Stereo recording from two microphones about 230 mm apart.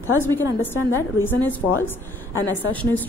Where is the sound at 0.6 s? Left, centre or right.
Centre.